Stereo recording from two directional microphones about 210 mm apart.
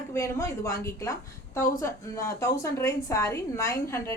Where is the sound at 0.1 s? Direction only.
15° left (ahead or behind).